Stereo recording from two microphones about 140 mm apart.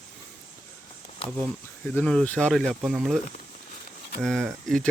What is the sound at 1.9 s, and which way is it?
Speech, 5° left (ahead or behind).